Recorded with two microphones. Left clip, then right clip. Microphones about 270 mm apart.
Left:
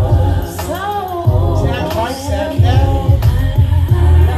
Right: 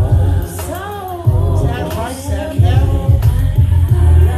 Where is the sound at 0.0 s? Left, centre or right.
Left.